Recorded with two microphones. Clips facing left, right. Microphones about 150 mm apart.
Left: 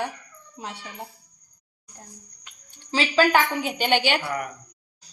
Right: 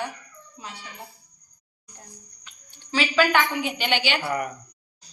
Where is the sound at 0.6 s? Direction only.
65° left (ahead or behind).